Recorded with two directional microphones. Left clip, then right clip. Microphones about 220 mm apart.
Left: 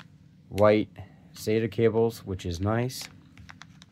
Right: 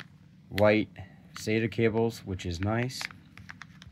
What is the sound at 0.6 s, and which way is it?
Speech, 10° left (ahead or behind).